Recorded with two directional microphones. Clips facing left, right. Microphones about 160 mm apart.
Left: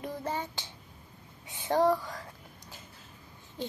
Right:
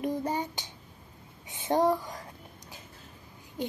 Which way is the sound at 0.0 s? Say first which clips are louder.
Right 5 dB; 15° right (ahead or behind).